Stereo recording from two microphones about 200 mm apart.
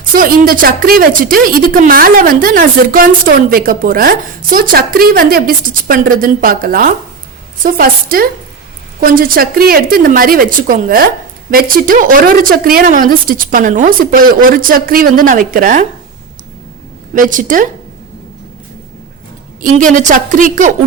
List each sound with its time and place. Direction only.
0.0 s speech: 45° right (ahead or behind)
17.2 s a woman's voice: 40° right (ahead or behind)
19.6 s a woman's voice: 40° right (ahead or behind)